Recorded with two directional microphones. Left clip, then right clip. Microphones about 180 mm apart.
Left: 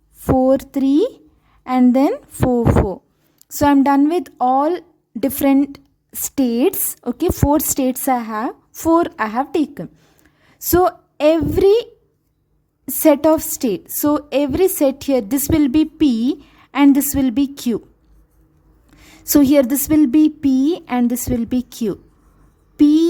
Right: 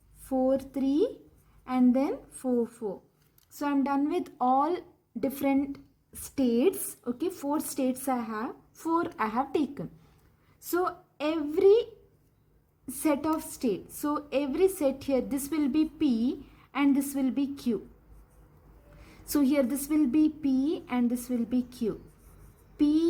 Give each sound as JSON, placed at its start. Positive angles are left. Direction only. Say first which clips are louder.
{"t": 0.3, "sound": "speech", "louder": "left 11 dB", "side_deg": 60}
{"t": 10.4, "sound": "a woman's voice", "louder": "left 14 dB", "side_deg": 55}
{"t": 18.9, "sound": "a woman's voice", "louder": "left 14 dB", "side_deg": 55}
{"t": 22.8, "sound": "a sound", "louder": "left 13 dB", "side_deg": 55}